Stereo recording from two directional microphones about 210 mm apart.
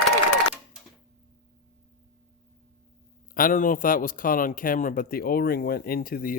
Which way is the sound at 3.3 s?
40° left (ahead or behind).